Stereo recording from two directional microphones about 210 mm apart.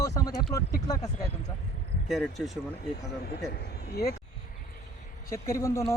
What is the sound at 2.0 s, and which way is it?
Speech, centre (ahead or behind).